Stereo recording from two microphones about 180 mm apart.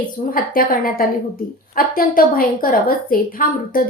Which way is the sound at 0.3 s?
50° left (ahead or behind).